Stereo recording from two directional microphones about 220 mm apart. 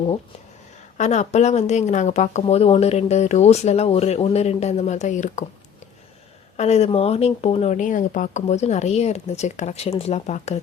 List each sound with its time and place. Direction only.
0.9 s speech: 30° left (ahead or behind)
6.6 s speech: 30° left (ahead or behind)